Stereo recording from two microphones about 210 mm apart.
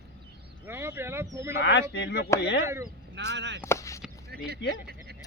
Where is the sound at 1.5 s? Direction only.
55° left (ahead or behind).